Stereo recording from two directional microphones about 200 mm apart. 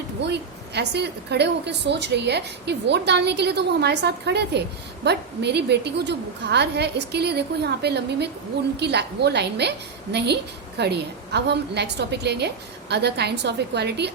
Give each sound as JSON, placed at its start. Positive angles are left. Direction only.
{"t": 0.3, "sound": "a woman's voice", "side_deg": -55}